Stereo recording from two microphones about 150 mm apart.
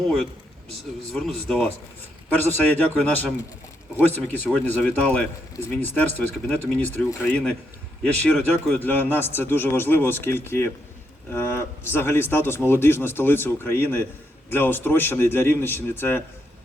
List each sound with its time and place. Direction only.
0.0 s speech: 5° left (ahead or behind)
2.3 s speech: 15° left (ahead or behind)
8.0 s speech: 10° left (ahead or behind)